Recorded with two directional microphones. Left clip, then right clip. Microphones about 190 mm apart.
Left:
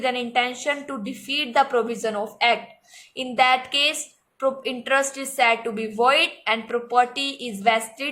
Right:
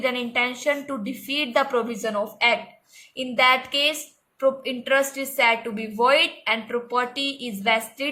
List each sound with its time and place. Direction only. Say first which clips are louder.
0.0 s a woman's voice: left 1 dB; 15° left (ahead or behind)